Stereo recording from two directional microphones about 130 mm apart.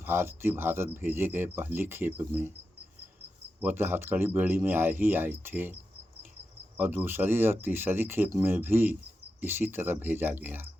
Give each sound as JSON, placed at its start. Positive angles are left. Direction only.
{"t": 0.0, "sound": "speech", "side_deg": -15}
{"t": 3.6, "sound": "speech", "side_deg": -15}
{"t": 6.7, "sound": "speech", "side_deg": -15}